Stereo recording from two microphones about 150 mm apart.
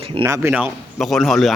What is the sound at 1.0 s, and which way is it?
Speech, centre (ahead or behind).